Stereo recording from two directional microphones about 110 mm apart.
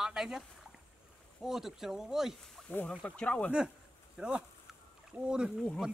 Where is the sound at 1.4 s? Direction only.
5° right (ahead or behind).